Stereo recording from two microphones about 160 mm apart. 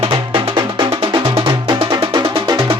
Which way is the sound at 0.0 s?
30° right (ahead or behind).